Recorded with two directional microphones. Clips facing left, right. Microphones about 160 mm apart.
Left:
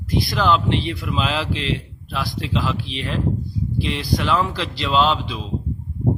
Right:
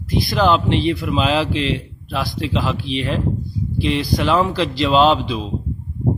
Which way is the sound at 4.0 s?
25° right (ahead or behind).